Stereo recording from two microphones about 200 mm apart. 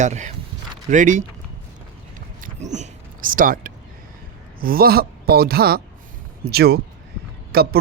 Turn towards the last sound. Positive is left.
turn(degrees=-50)  # may be behind; listen again after turning